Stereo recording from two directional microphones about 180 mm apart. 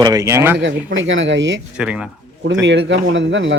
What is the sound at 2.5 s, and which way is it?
Speech, 90° right.